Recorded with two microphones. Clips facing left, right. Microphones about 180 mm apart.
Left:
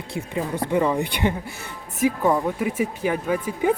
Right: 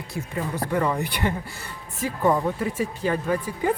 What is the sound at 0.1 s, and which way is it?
Speech, 25° left (ahead or behind).